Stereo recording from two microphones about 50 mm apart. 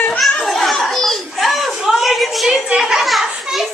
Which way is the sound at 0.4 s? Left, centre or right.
Centre.